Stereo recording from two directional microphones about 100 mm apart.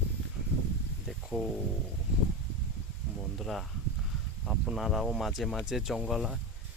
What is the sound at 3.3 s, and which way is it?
Speech, centre (ahead or behind).